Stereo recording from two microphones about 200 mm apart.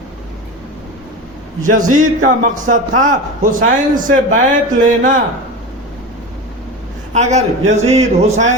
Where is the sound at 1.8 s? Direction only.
40° right (ahead or behind).